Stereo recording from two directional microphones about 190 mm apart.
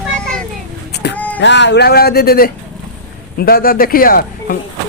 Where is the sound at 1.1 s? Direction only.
10° left (ahead or behind).